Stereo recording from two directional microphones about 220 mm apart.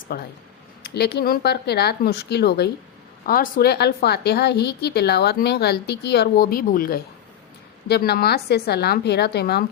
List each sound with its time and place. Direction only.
0.1 s a woman's voice: 45° left (ahead or behind)